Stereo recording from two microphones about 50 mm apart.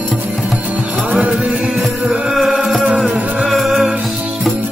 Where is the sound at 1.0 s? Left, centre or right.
Right.